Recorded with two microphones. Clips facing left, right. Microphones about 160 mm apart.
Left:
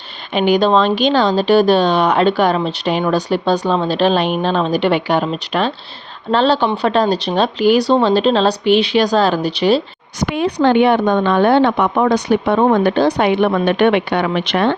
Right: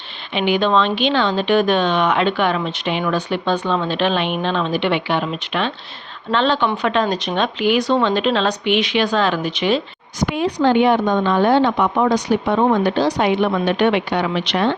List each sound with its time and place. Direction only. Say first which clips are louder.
0.3 s speech: left 4 dB; 40° left (ahead or behind)
10.2 s a woman's voice: left 2 dB; 65° left (ahead or behind)